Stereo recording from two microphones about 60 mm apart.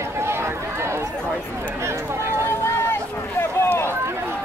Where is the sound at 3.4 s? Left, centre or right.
Left.